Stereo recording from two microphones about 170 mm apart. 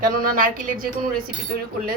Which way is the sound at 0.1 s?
55° right (ahead or behind).